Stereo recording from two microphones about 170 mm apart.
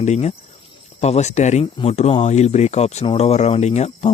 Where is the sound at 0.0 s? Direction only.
40° left (ahead or behind).